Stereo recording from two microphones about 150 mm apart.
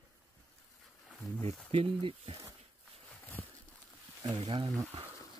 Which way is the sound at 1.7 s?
35° right (ahead or behind).